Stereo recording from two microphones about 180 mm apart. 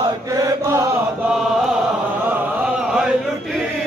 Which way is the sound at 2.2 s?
5° right (ahead or behind).